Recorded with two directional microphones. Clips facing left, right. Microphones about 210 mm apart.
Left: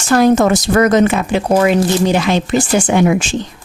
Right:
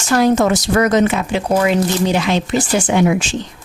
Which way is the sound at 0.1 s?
50° left (ahead or behind).